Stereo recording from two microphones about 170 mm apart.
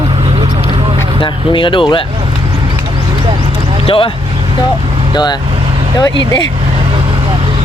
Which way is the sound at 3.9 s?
30° left (ahead or behind).